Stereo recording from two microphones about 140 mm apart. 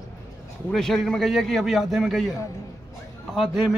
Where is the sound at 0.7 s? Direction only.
5° left (ahead or behind).